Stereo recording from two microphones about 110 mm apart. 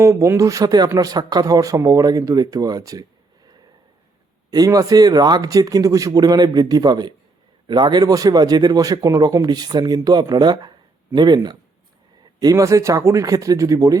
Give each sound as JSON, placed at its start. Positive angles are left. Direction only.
{"t": 0.0, "sound": "a man's voice", "side_deg": -30}
{"t": 12.4, "sound": "a man's voice", "side_deg": -30}